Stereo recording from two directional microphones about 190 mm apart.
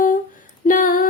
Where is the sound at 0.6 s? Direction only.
45° left (ahead or behind).